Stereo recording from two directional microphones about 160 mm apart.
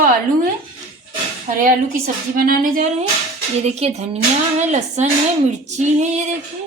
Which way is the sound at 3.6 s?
45° right (ahead or behind).